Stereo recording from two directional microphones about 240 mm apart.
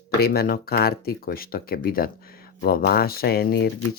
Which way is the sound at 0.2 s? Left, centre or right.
Left.